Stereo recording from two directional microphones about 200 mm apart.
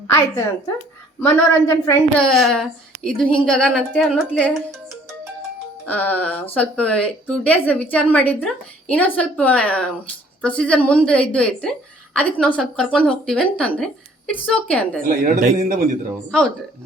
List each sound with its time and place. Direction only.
0.1 s a woman's voice: 15° left (ahead or behind)
15.0 s a man's voice: 40° right (ahead or behind)